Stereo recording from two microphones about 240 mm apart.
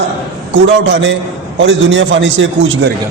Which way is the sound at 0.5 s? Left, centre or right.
Right.